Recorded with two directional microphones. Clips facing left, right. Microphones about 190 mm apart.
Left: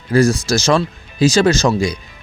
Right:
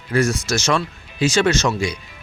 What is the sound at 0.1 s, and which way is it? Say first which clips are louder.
Speech: left 5 dB; 35° left (ahead or behind).